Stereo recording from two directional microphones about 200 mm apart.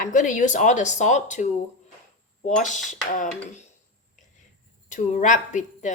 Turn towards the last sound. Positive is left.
turn(degrees=40)  # may be behind; listen again after turning